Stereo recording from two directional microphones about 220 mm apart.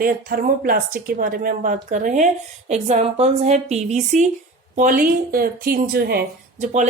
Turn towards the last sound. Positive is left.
turn(degrees=-40)  # may be behind; listen again after turning